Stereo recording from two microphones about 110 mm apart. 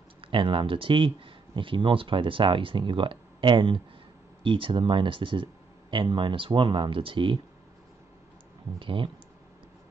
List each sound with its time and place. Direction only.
0.3 s speech: 50° right (ahead or behind)
8.7 s speech: 50° right (ahead or behind)